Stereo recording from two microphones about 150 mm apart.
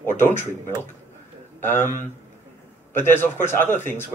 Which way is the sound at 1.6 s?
15° left (ahead or behind).